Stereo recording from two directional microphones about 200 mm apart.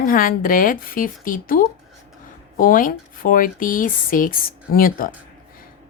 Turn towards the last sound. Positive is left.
turn(degrees=45)  # may be behind; listen again after turning